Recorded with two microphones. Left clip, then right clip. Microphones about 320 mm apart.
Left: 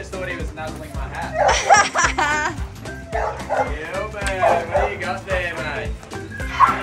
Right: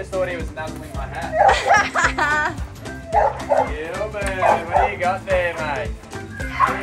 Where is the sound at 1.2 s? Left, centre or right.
Centre.